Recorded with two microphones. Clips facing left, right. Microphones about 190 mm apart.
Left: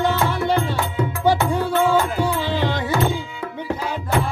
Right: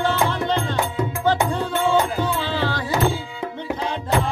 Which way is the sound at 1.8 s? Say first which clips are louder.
Even; 20° right (ahead or behind).